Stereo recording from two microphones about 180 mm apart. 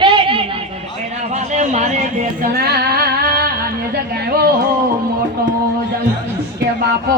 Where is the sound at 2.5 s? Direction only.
60° right (ahead or behind).